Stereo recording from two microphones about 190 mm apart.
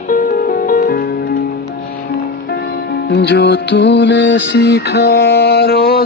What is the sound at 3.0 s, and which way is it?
Music, 65° left (ahead or behind).